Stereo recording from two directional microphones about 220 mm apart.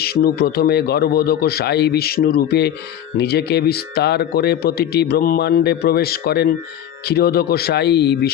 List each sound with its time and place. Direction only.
0.0 s speech: 45° left (ahead or behind)